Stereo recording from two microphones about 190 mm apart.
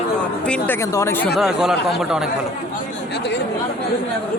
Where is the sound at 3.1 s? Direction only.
60° left (ahead or behind).